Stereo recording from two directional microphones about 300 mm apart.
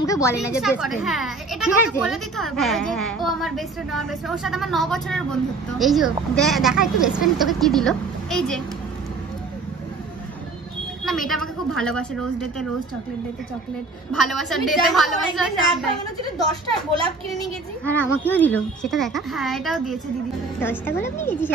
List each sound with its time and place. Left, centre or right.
0.0 s a woman's voice: centre
0.6 s a woman's voice: centre
11.1 s a woman's voice: centre
14.1 s a woman's voice: centre
16.2 s speech: centre
17.4 s a woman's voice: centre